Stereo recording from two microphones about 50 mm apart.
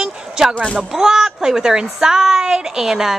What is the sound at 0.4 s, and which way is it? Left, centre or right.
Speech, centre.